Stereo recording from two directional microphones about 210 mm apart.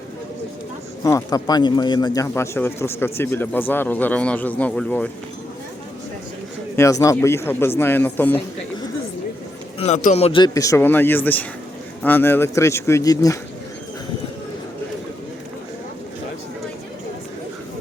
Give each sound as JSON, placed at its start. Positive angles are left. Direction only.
{"t": 1.0, "sound": "speech", "side_deg": 15}
{"t": 6.7, "sound": "speech", "side_deg": 15}
{"t": 9.7, "sound": "speech", "side_deg": 30}